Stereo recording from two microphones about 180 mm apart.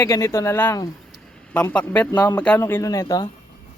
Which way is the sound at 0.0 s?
15° left (ahead or behind).